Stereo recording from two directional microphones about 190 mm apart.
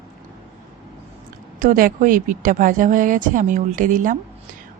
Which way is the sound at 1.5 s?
45° right (ahead or behind).